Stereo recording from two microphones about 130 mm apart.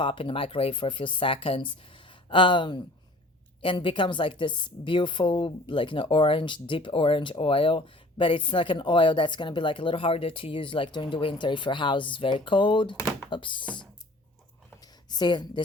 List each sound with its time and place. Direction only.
0.0 s a woman's voice: 45° left (ahead or behind)
15.1 s a woman's voice: 35° left (ahead or behind)